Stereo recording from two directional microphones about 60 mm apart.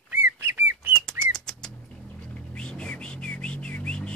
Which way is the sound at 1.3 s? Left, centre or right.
Centre.